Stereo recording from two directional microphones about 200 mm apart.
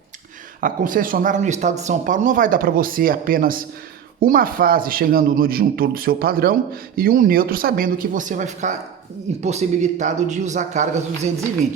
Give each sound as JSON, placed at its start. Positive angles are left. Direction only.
{"t": 0.6, "sound": "speech", "side_deg": -45}